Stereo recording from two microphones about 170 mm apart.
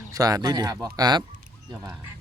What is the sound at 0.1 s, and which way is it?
Speech, 20° right (ahead or behind).